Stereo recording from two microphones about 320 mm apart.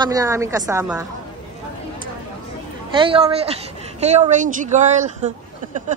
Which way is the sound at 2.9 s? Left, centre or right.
Centre.